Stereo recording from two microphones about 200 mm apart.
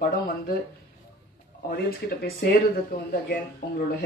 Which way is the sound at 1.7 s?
50° left (ahead or behind).